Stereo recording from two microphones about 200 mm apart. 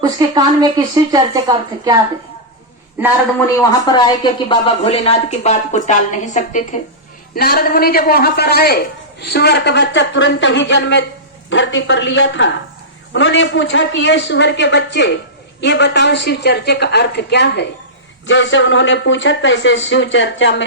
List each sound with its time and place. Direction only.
0.0 s a woman's voice: 20° right (ahead or behind)
3.6 s speech: 20° left (ahead or behind); by 6.7 s 40° left (ahead or behind)
7.3 s a man's voice: 50° left (ahead or behind)
18.3 s speech: 70° left (ahead or behind)